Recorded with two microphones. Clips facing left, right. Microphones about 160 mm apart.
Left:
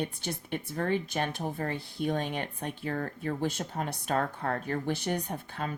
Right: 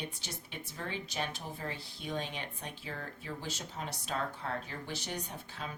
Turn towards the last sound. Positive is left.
turn(degrees=55)  # may be behind; listen again after turning